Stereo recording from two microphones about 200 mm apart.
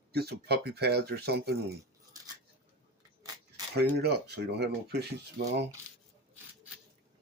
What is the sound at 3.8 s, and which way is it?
Speech, 55° right (ahead or behind).